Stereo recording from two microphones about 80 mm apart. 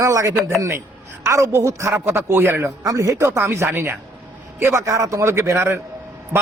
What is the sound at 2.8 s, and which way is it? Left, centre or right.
Speech, right.